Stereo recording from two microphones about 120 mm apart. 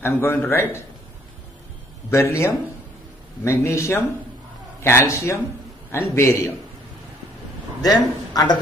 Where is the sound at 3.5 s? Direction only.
25° left (ahead or behind).